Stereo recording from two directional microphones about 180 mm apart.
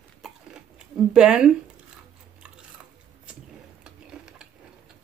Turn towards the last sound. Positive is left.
turn(degrees=-5)  # may be behind; listen again after turning